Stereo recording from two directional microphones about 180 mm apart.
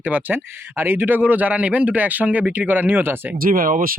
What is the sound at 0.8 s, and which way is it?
Speech, 10° right (ahead or behind).